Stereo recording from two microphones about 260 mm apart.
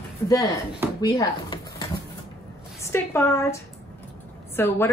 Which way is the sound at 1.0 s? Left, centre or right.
Centre.